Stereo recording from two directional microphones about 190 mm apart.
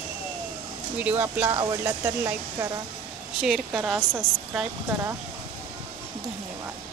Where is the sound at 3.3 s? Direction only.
Centre (ahead or behind).